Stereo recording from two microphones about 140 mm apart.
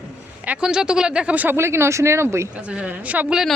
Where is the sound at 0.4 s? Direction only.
10° right (ahead or behind).